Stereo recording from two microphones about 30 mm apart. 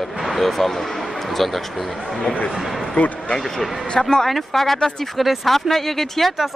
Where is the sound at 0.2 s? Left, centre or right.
Centre.